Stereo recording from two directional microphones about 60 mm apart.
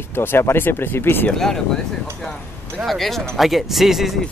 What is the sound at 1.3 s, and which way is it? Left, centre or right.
Speech, centre.